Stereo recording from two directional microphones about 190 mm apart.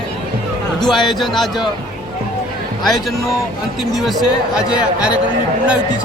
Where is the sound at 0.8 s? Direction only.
Centre (ahead or behind).